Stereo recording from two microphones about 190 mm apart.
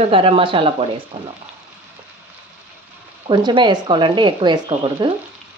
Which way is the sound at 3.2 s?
25° right (ahead or behind).